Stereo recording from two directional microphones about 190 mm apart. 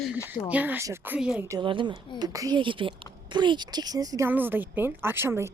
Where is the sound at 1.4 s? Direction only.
25° right (ahead or behind).